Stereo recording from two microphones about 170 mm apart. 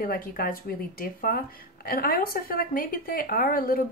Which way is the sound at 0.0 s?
60° left (ahead or behind).